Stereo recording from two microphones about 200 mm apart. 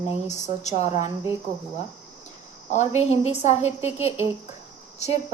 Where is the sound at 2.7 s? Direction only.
35° left (ahead or behind).